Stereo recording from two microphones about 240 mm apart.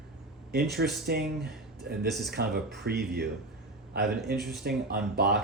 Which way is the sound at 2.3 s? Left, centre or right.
Right.